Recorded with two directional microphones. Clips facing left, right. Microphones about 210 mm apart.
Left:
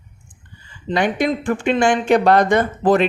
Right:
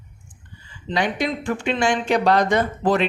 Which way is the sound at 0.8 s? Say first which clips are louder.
Left 4 dB; 50° left (ahead or behind).